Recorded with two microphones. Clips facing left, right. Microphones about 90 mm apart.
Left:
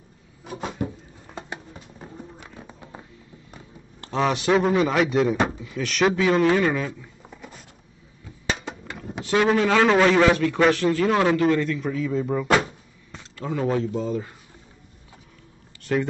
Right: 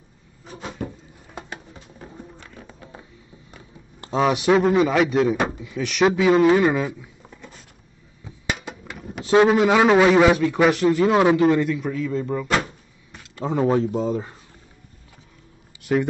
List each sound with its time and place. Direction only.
0.4 s cupboard open or close: 60° left (ahead or behind)
1.5 s a sound: 15° left (ahead or behind)
2.3 s music: 15° left (ahead or behind)
4.0 s a man's voice: 15° right (ahead or behind)
7.2 s a sound: 10° left (ahead or behind)
9.2 s a sound: 25° right (ahead or behind)
9.6 s a man's voice: 15° right (ahead or behind)
11.8 s speech: centre (ahead or behind)
13.4 s speech: 30° right (ahead or behind)
15.8 s speech: 10° right (ahead or behind)